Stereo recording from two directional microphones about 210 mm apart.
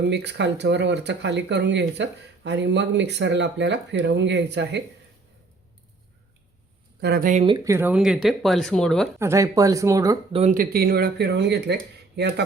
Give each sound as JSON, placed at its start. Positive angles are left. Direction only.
{"t": 0.0, "sound": "speech", "side_deg": -55}
{"t": 7.0, "sound": "speech", "side_deg": -45}
{"t": 7.4, "sound": "speech", "side_deg": -15}
{"t": 9.1, "sound": "speech", "side_deg": -15}
{"t": 10.3, "sound": "speech", "side_deg": -35}